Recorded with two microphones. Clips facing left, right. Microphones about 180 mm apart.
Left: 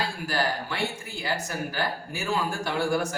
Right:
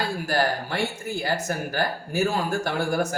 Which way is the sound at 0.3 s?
45° right (ahead or behind).